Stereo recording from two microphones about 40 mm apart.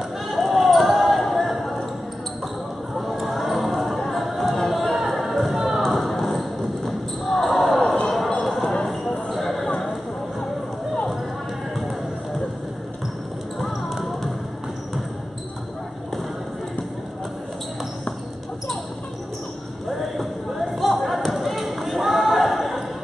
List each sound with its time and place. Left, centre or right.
0.3 s basketball bounce: centre
3.0 s music: centre
5.8 s basketball bounce: centre
7.8 s basketball bounce: centre
9.3 s a sound: centre
13.6 s basketball bounce: centre
19.9 s basketball bounce: centre